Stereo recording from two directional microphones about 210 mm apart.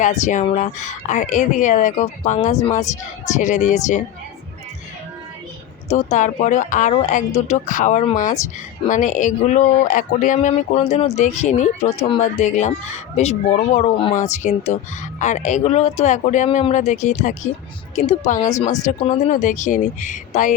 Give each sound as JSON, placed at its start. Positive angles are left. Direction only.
{"t": 0.0, "sound": "speech", "side_deg": 35}
{"t": 5.9, "sound": "speech", "side_deg": 35}
{"t": 18.3, "sound": "speech", "side_deg": 15}
{"t": 18.6, "sound": "speech", "side_deg": 30}